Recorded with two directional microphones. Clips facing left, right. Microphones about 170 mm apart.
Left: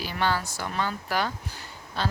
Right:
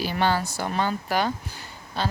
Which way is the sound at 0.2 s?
25° right (ahead or behind).